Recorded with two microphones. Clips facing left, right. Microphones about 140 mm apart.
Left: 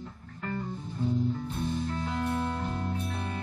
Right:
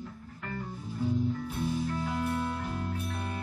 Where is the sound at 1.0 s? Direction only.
10° right (ahead or behind).